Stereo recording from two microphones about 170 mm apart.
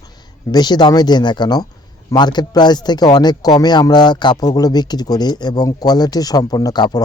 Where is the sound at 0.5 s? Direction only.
25° left (ahead or behind).